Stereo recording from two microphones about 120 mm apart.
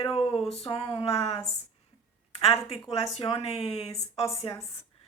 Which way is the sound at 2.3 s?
50° left (ahead or behind).